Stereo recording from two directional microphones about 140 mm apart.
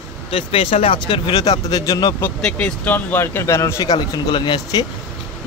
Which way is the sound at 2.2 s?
10° left (ahead or behind).